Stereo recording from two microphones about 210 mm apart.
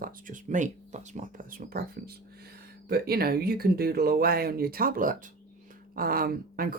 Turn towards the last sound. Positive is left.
turn(degrees=-45)  # may be behind; listen again after turning